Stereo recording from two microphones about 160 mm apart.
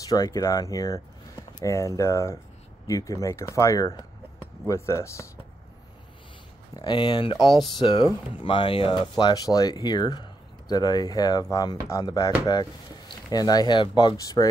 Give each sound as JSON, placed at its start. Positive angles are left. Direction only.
{"t": 0.1, "sound": "speech", "side_deg": 20}
{"t": 6.7, "sound": "speech", "side_deg": 30}